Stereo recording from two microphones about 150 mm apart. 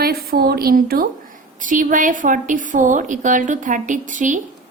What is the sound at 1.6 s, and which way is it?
A woman's voice, 60° right (ahead or behind).